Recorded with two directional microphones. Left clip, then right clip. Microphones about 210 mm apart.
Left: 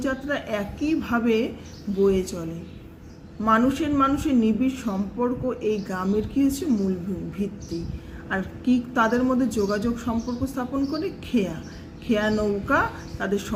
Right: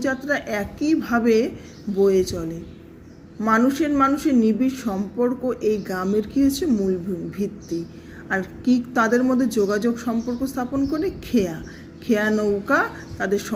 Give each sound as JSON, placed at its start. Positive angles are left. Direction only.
{"t": 0.0, "sound": "a woman's voice", "side_deg": -25}